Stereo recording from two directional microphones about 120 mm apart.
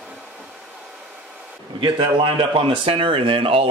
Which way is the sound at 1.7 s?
40° right (ahead or behind).